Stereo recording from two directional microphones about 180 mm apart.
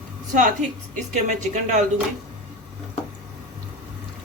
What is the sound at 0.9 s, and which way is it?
Speech, 45° right (ahead or behind).